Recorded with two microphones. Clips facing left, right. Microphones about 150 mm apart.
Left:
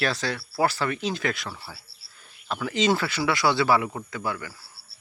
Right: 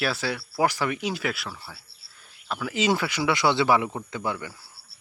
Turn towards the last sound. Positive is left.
turn(degrees=-20)  # may be behind; listen again after turning